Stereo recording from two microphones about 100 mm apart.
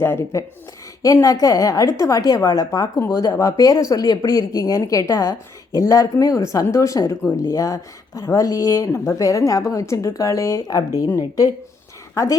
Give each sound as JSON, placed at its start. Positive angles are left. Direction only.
{"t": 0.0, "sound": "speech", "side_deg": 25}
{"t": 12.1, "sound": "a woman's voice", "side_deg": 30}